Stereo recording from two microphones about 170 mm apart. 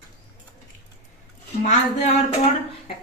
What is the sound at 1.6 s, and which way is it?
Speech, 45° left (ahead or behind).